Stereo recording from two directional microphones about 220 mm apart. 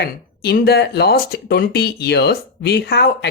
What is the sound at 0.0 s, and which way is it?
Speech, 45° left (ahead or behind).